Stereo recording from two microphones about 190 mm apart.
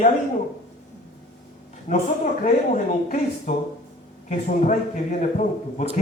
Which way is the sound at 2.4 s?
40° left (ahead or behind).